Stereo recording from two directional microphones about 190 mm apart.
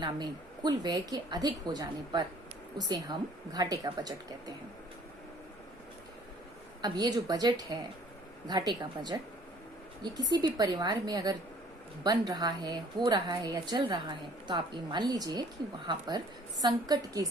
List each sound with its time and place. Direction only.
0.0 s a woman's voice: 25° right (ahead or behind)
6.8 s a woman's voice: 20° right (ahead or behind)